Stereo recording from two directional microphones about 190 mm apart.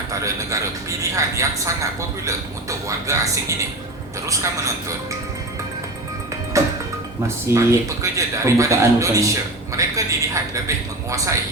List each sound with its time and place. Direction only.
0.1 s a man's voice: 15° right (ahead or behind)
6.5 s music: 15° right (ahead or behind)
7.5 s a man's voice: 15° right (ahead or behind)